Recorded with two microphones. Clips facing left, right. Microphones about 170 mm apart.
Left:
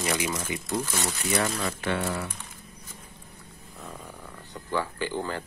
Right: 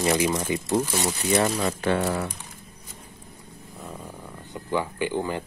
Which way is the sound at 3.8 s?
10° right (ahead or behind).